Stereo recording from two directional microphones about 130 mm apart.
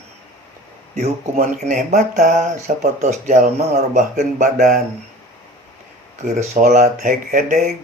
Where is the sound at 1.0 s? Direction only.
60° right (ahead or behind).